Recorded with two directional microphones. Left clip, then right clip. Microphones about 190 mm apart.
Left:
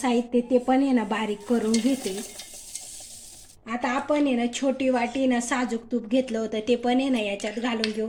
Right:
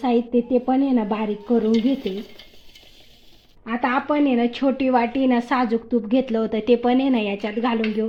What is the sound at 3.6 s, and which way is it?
A woman's voice, 30° right (ahead or behind).